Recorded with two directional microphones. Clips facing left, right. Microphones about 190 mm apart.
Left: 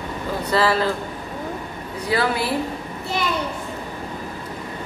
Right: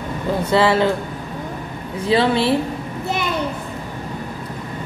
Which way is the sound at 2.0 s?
25° right (ahead or behind).